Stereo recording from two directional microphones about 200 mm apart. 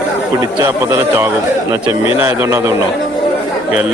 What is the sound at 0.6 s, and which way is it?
A man's voice, 15° right (ahead or behind).